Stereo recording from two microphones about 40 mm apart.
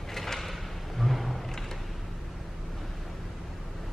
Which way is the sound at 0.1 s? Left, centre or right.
Centre.